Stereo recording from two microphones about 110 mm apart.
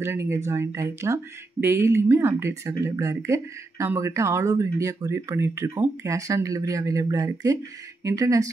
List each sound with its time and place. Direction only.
0.0 s speech: 25° right (ahead or behind)